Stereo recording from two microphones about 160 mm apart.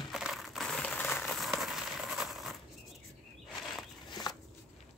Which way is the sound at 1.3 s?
Centre (ahead or behind).